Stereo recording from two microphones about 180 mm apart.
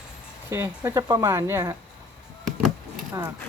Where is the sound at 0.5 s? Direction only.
15° right (ahead or behind).